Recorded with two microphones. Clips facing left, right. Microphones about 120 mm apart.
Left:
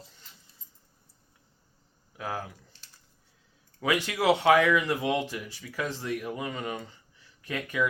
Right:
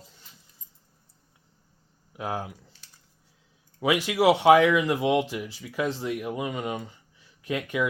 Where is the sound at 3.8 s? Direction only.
15° right (ahead or behind).